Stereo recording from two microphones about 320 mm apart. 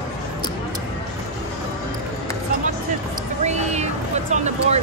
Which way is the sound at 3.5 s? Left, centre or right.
Right.